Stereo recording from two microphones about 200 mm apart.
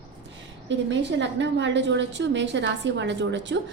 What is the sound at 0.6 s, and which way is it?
A woman's voice, 60° right (ahead or behind).